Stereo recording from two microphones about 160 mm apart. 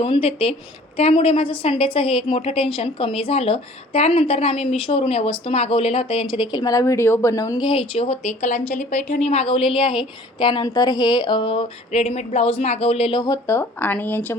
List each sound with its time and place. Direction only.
0.0 s a woman's voice: 35° left (ahead or behind)
7.7 s a woman's voice: 35° left (ahead or behind)
11.9 s a woman's voice: 45° left (ahead or behind); by 14.3 s 10° left (ahead or behind)